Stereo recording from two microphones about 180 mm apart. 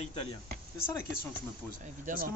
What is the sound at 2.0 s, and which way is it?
Speech, 50° right (ahead or behind).